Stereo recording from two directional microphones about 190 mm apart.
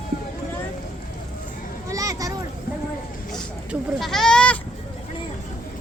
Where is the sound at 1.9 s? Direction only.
20° right (ahead or behind).